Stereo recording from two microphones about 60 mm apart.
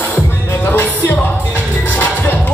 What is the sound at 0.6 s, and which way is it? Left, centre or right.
Music, left.